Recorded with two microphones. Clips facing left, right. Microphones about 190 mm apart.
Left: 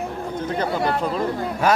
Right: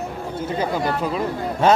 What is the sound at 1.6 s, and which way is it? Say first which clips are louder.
Speech: right 3 dB; 25° right (ahead or behind).